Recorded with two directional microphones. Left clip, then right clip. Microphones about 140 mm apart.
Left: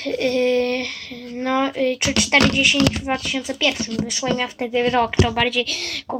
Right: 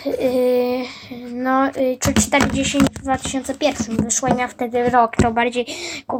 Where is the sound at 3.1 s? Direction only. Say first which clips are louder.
Even; 25° left (ahead or behind).